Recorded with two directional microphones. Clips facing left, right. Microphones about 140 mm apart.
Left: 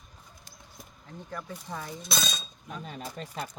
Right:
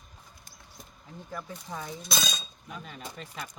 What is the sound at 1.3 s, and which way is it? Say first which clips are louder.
Speech: even; centre (ahead or behind).